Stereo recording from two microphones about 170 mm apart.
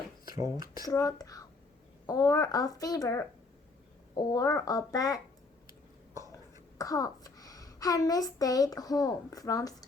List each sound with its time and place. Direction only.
0.3 s speech: 20° right (ahead or behind)
0.9 s a child's voice: 20° left (ahead or behind)
6.3 s a child's voice: 20° left (ahead or behind)